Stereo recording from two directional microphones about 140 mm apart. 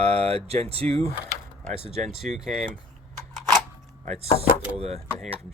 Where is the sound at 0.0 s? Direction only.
45° right (ahead or behind).